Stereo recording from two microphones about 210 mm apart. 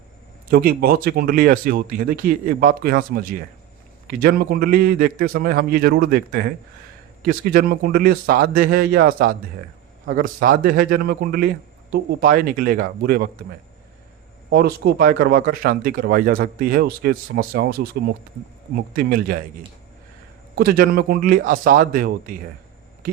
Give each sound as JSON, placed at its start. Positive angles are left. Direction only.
{"t": 0.5, "sound": "speech", "side_deg": -45}
{"t": 14.5, "sound": "speech", "side_deg": -45}
{"t": 18.9, "sound": "speech", "side_deg": -45}
{"t": 20.6, "sound": "speech", "side_deg": -45}